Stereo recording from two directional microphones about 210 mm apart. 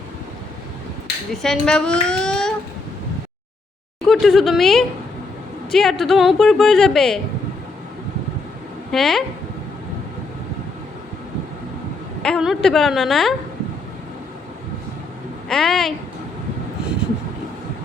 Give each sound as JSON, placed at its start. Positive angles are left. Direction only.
{"t": 1.3, "sound": "a child's voice", "side_deg": 0}
{"t": 4.0, "sound": "a woman's voice", "side_deg": 0}
{"t": 8.9, "sound": "a woman's voice", "side_deg": 0}
{"t": 12.2, "sound": "a woman's voice", "side_deg": 0}
{"t": 15.4, "sound": "a woman's voice", "side_deg": 0}